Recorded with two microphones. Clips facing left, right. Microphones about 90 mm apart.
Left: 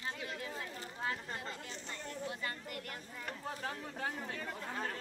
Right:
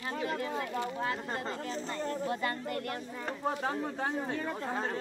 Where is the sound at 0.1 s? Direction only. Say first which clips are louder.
Right 9 dB; 55° right (ahead or behind).